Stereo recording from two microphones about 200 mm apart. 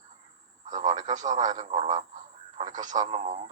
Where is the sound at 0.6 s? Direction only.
35° right (ahead or behind).